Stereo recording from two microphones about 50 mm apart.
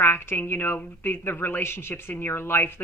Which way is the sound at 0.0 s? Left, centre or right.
Left.